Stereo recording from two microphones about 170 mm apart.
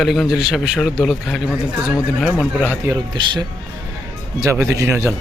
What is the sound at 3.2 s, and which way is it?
Speech, 30° right (ahead or behind).